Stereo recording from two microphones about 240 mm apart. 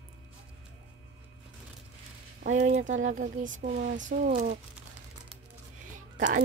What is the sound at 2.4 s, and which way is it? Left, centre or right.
Speech, right.